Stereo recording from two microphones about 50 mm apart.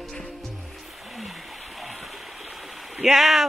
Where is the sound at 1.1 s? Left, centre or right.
Centre.